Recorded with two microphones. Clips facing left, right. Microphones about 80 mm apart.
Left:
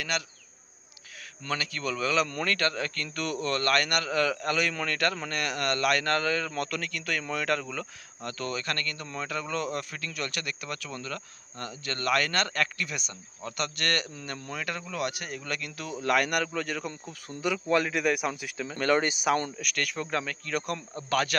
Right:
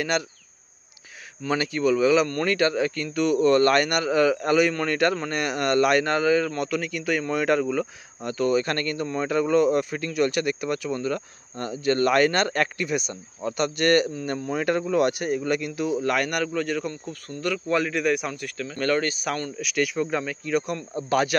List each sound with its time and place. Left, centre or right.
0.1 s speech: right
1.5 s speech: right
16.0 s speech: centre
19.6 s speech: centre
21.1 s speech: centre